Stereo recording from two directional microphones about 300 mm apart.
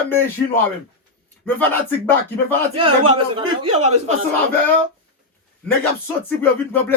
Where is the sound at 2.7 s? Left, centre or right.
Centre.